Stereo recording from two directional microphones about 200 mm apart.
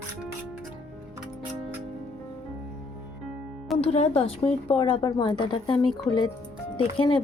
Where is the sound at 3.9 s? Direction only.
30° left (ahead or behind).